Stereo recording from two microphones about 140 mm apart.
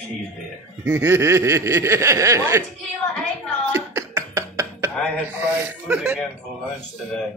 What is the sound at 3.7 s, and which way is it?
Beatboxing, 20° right (ahead or behind).